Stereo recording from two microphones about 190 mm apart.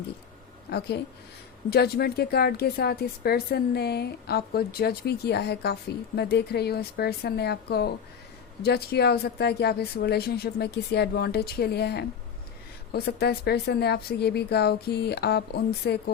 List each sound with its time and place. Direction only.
0.7 s a woman's voice: 60° left (ahead or behind)